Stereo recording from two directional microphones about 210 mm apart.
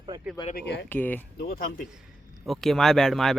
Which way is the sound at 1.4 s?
45° left (ahead or behind).